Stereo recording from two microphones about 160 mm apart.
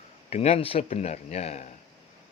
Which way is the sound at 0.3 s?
40° left (ahead or behind).